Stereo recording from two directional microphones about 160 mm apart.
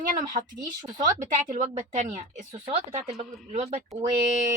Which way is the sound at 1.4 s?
50° right (ahead or behind).